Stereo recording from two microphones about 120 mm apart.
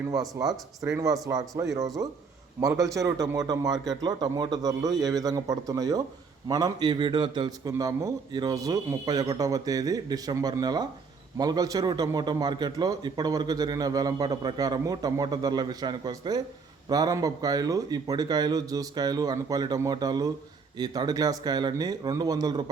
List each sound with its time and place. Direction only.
0.1 s a man's voice: 30° right (ahead or behind)
7.7 s a man's voice: 25° right (ahead or behind)